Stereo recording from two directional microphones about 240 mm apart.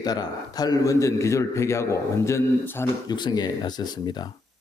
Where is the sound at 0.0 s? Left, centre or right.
Centre.